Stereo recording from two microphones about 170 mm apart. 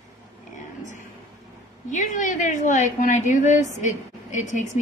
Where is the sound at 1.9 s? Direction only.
45° left (ahead or behind).